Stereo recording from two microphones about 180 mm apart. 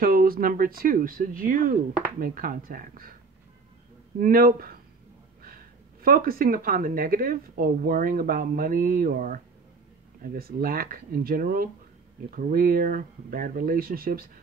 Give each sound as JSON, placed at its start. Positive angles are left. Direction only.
{"t": 0.0, "sound": "speech", "side_deg": -50}
{"t": 4.2, "sound": "speech", "side_deg": -50}
{"t": 6.0, "sound": "speech", "side_deg": -55}